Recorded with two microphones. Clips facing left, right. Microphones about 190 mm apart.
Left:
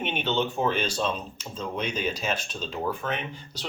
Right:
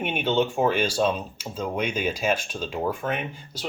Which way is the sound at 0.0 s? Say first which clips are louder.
Right 4 dB; 10° right (ahead or behind).